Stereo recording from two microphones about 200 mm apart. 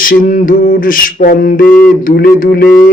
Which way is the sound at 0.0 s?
45° left (ahead or behind).